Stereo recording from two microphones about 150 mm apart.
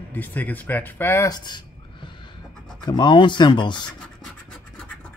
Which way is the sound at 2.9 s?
30° left (ahead or behind).